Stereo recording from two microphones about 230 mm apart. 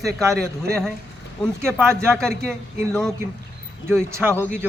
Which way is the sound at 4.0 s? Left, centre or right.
Centre.